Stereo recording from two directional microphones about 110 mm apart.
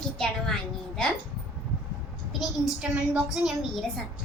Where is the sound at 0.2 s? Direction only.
5° left (ahead or behind).